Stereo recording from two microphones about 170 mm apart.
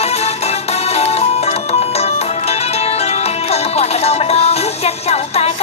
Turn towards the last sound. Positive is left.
turn(degrees=40)  # may be behind; listen again after turning